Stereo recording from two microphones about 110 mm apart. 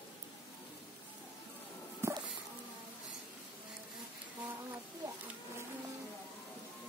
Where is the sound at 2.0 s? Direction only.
25° right (ahead or behind).